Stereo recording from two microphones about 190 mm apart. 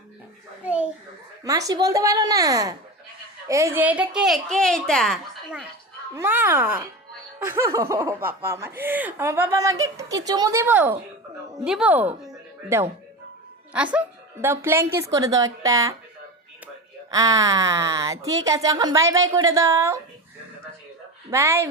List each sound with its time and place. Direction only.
0.6 s a sound: 10° right (ahead or behind)
1.5 s a woman's voice: 20° right (ahead or behind); by 5.6 s centre (ahead or behind)
6.1 s a woman's voice: 10° right (ahead or behind)
17.1 s speech: 20° right (ahead or behind)
21.2 s speech: 15° right (ahead or behind)